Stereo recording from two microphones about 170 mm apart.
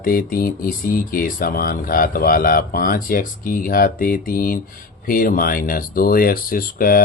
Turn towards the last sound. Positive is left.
turn(degrees=55)  # may be behind; listen again after turning